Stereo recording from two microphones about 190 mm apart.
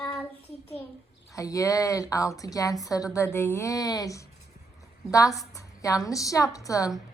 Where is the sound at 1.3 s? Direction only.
15° left (ahead or behind).